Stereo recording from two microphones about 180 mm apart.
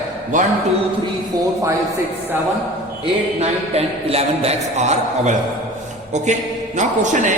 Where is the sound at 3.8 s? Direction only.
35° right (ahead or behind).